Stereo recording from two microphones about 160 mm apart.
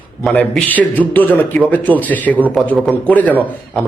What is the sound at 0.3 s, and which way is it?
A man's voice, 10° left (ahead or behind).